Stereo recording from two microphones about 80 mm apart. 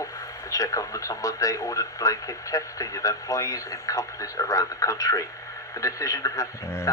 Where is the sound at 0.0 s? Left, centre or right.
Left.